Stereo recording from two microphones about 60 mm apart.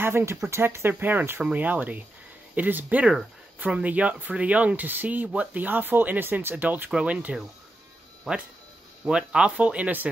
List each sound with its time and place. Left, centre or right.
0.0 s speech: right
8.3 s speech: centre
9.0 s speech: centre